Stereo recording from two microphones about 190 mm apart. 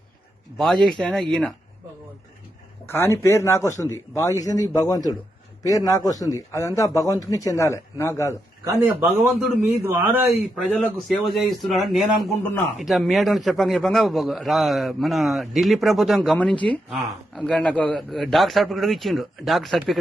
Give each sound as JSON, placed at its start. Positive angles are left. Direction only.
{"t": 0.6, "sound": "a man's voice", "side_deg": 5}
{"t": 2.8, "sound": "a man's voice", "side_deg": 10}
{"t": 8.6, "sound": "a man's voice", "side_deg": -10}